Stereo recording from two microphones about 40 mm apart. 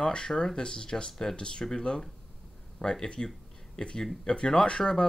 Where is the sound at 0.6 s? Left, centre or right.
Centre.